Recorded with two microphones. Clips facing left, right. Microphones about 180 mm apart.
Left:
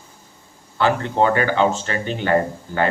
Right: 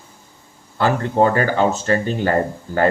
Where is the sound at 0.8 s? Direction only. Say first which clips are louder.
Right 2 dB; 40° right (ahead or behind).